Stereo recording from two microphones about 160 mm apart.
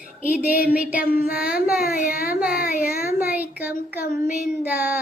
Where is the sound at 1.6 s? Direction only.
65° left (ahead or behind).